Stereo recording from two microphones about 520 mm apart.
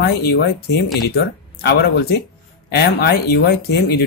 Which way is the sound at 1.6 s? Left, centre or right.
Centre.